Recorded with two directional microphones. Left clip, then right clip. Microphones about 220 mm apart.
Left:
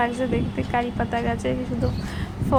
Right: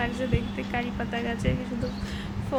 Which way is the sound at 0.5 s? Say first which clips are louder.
Left 6 dB; 15° left (ahead or behind).